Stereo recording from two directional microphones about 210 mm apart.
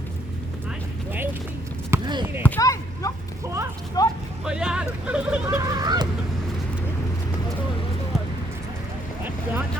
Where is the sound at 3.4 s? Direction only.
15° right (ahead or behind).